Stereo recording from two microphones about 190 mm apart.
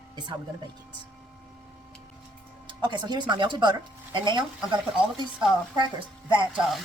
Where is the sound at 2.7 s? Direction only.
25° right (ahead or behind).